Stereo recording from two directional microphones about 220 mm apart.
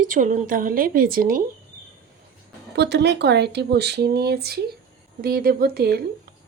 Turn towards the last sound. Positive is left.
turn(degrees=-45)  # may be behind; listen again after turning